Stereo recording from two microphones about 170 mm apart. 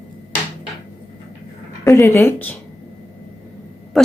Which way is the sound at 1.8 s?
20° left (ahead or behind).